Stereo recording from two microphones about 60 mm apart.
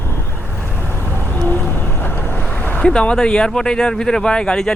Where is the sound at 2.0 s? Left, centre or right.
Left.